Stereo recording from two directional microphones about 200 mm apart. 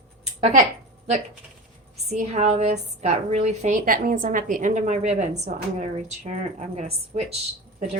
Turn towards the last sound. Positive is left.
turn(degrees=-35)  # may be behind; listen again after turning